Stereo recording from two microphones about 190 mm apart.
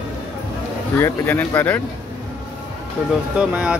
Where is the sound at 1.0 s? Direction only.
10° left (ahead or behind).